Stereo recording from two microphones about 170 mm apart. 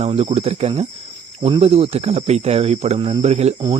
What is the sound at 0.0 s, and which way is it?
Speech, 35° right (ahead or behind).